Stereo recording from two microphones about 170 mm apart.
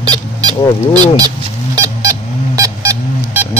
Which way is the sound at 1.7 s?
20° right (ahead or behind).